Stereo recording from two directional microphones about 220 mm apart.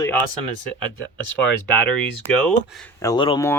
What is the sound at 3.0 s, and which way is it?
Speech, 20° left (ahead or behind).